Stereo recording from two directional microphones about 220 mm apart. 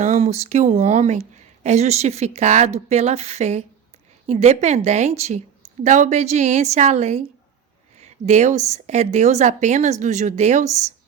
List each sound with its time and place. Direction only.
0.0 s speech: 30° right (ahead or behind)